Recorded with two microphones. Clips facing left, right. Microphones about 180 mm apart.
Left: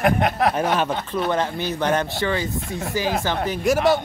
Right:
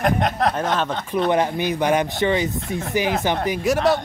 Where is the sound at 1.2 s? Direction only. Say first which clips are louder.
Right 4 dB; 15° right (ahead or behind).